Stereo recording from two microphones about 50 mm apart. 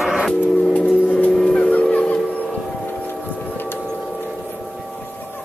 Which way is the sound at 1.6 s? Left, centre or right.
Left.